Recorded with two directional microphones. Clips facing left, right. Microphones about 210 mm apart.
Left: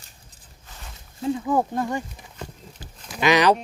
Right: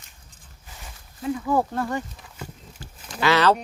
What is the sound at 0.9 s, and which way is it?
Speech, 25° left (ahead or behind).